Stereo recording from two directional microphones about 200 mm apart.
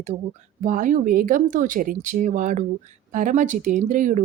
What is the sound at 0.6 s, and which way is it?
Speech, 40° right (ahead or behind).